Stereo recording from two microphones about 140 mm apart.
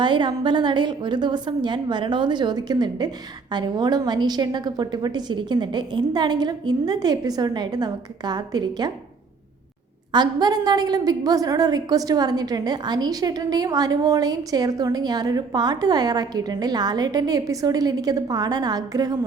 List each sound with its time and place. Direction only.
0.0 s a woman's voice: 35° right (ahead or behind)
10.1 s a woman's voice: 30° right (ahead or behind)